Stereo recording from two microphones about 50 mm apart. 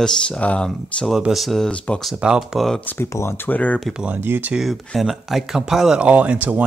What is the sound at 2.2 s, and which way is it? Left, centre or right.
Speech, centre.